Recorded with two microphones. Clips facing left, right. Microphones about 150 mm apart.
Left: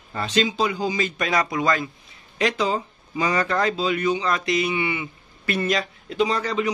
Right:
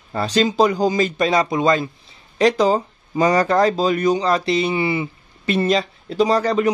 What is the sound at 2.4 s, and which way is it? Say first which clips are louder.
A man's voice: right 7 dB; 40° right (ahead or behind).